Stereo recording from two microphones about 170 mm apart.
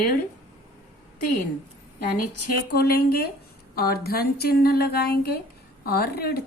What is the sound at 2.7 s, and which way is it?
Speech, 65° left (ahead or behind).